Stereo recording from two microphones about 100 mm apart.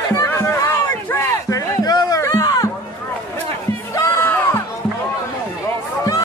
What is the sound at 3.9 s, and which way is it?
Crowd, 25° left (ahead or behind).